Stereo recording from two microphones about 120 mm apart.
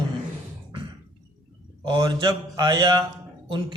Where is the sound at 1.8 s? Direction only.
35° right (ahead or behind).